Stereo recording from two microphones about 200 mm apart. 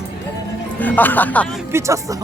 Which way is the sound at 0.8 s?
10° left (ahead or behind).